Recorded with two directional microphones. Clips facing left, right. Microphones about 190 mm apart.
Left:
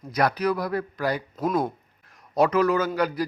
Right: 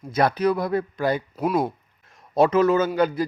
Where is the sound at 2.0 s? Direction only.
25° right (ahead or behind).